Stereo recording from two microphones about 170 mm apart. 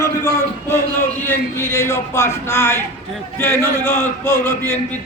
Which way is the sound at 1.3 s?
15° left (ahead or behind).